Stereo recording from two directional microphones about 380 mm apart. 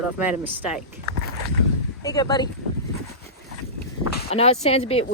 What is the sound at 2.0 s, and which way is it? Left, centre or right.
Speech, centre.